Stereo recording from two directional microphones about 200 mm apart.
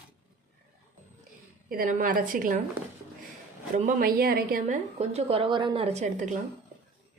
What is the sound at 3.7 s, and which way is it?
A woman's voice, 40° right (ahead or behind).